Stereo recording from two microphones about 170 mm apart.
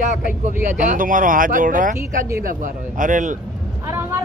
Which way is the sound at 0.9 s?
50° right (ahead or behind).